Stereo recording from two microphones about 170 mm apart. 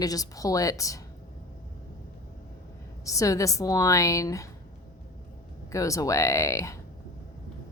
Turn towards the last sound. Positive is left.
turn(degrees=20)  # may be behind; listen again after turning